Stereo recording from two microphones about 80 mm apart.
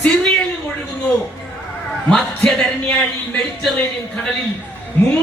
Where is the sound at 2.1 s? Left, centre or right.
Centre.